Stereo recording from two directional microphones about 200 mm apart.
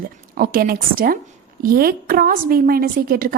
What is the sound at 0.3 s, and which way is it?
A woman's voice, 45° right (ahead or behind).